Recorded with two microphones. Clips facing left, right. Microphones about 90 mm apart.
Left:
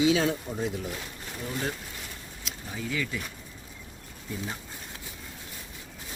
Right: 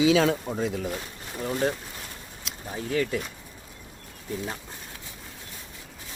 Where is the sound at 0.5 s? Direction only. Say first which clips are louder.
Right 4 dB; 90° right.